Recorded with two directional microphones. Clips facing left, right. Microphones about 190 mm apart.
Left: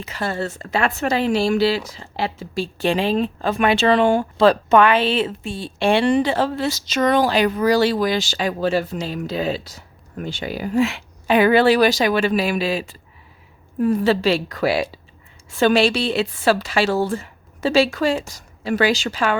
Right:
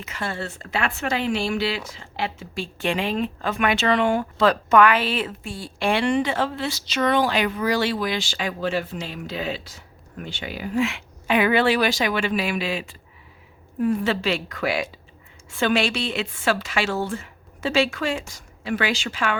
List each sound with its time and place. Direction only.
0.0 s a woman's voice: 35° left (ahead or behind)